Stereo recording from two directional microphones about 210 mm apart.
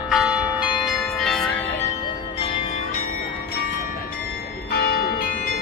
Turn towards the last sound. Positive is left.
turn(degrees=45)  # may be behind; listen again after turning